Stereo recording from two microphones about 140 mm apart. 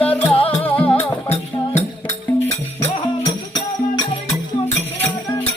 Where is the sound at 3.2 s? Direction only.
35° left (ahead or behind).